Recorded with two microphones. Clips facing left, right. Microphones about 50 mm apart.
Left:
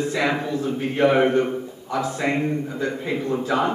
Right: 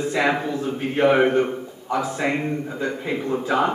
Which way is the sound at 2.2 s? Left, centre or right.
Centre.